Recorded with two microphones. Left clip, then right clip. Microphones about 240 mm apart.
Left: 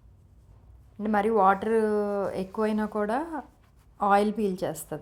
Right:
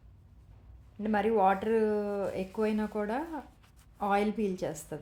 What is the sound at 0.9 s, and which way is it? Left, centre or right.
A woman's voice, left.